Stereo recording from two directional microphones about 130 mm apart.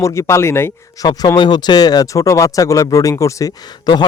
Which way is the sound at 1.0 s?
30° left (ahead or behind).